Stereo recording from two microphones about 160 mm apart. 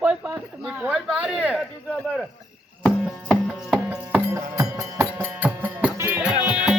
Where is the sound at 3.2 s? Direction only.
5° right (ahead or behind).